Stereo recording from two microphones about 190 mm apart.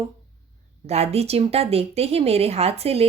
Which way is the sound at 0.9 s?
35° right (ahead or behind).